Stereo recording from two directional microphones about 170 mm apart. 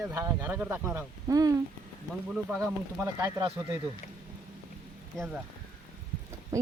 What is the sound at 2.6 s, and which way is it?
Speech, 20° right (ahead or behind).